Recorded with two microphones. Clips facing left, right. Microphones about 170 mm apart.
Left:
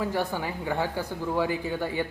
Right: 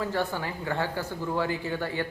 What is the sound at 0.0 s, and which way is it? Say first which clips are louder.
Speech: left 1 dB; 15° left (ahead or behind).